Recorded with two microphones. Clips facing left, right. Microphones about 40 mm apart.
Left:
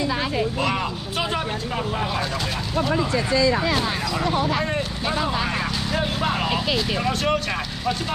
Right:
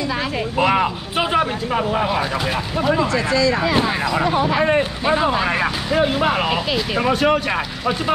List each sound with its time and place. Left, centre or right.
0.6 s speech: right
3.7 s speech: right